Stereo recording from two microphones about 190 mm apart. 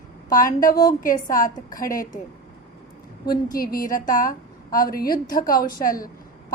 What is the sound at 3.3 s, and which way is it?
A woman's voice, 50° left (ahead or behind).